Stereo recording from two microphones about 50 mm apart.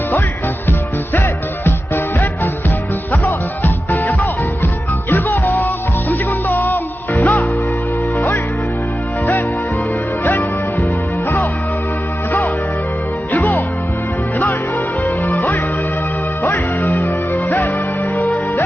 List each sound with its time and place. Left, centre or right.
2.1 s music: left
10.2 s music: left
13.3 s music: left
15.0 s music: left